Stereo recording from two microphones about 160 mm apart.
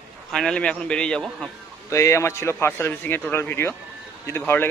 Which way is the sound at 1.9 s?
20° left (ahead or behind).